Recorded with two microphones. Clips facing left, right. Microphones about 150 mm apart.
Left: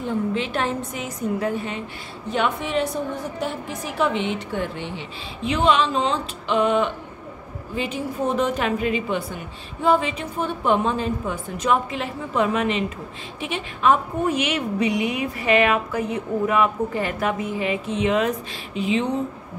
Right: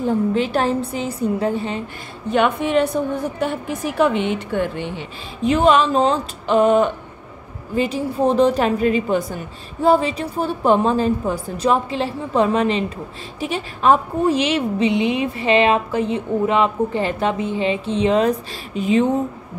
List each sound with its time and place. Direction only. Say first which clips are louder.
0.0 s a woman's voice: right 5 dB; 40° right (ahead or behind)
2.3 s a woman's voice: right 6 dB; 60° right (ahead or behind)
4.0 s a woman's voice: right 5 dB; 55° right (ahead or behind)
5.4 s a woman's voice: right 5 dB; 45° right (ahead or behind)
18.8 s speech: right 5 dB; 45° right (ahead or behind)